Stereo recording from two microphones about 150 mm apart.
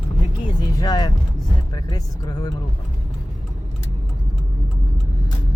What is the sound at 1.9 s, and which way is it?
Speech, 25° left (ahead or behind).